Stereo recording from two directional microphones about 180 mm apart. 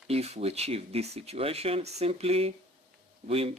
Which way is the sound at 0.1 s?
35° right (ahead or behind).